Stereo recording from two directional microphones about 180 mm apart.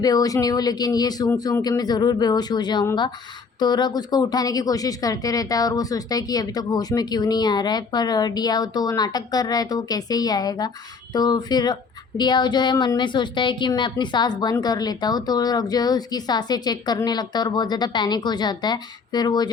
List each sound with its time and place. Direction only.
0.0 s speech: 20° left (ahead or behind)